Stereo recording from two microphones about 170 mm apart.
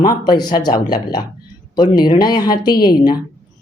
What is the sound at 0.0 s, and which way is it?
Speech, 25° left (ahead or behind).